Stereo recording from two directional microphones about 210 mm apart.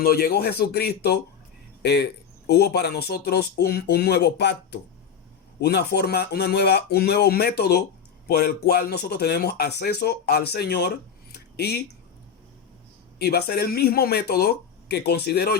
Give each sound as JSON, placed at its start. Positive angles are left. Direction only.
{"t": 0.0, "sound": "speech", "side_deg": 45}
{"t": 13.1, "sound": "speech", "side_deg": 50}